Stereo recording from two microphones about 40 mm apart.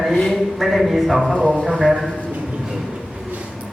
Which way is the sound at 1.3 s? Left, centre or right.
Left.